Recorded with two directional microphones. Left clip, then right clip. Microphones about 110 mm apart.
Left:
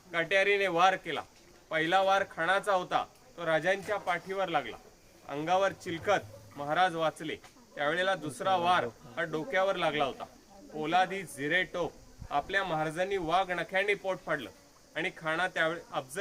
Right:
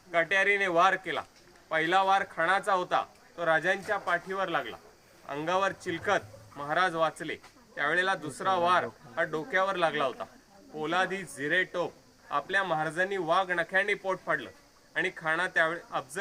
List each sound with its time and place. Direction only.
0.1 s a man's voice: 35° left (ahead or behind)